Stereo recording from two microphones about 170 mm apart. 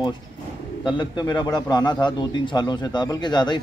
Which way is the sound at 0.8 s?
25° left (ahead or behind).